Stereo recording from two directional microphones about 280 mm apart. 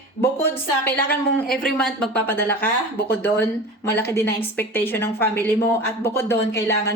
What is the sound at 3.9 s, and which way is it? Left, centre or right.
Speech, centre.